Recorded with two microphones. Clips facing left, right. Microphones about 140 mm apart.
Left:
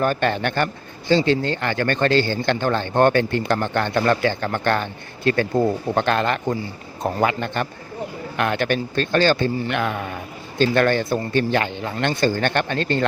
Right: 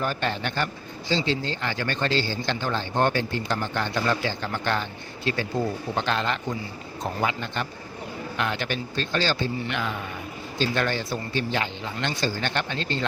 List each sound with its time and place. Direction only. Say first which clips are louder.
0.0 s speech: left 7 dB; 55° left (ahead or behind)